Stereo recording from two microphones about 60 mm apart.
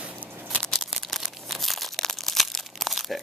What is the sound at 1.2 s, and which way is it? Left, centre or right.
Crumpling, centre.